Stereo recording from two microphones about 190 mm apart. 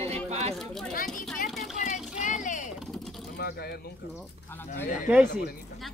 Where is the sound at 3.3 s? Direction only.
55° left (ahead or behind).